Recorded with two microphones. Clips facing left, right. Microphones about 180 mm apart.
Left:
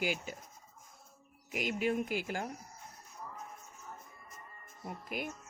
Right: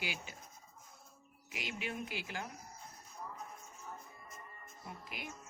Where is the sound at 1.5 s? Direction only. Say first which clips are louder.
Left 10 dB; 45° left (ahead or behind).